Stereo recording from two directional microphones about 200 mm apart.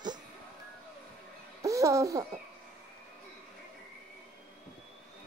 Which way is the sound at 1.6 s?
15° right (ahead or behind).